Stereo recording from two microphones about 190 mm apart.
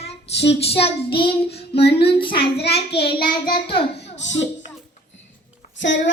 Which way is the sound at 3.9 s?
65° left (ahead or behind).